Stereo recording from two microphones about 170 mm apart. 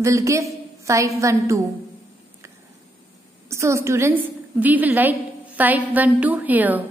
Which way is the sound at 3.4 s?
15° right (ahead or behind).